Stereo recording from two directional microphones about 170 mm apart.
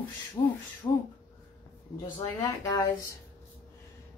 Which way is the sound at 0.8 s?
20° left (ahead or behind).